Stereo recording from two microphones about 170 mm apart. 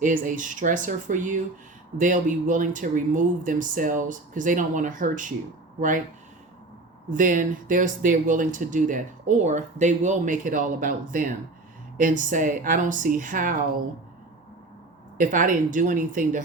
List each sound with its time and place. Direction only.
0.0 s speech: 50° right (ahead or behind)
7.1 s speech: 50° right (ahead or behind)
15.2 s speech: 50° right (ahead or behind)